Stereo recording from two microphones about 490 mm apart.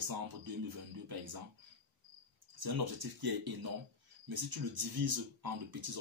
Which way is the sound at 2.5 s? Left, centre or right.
Right.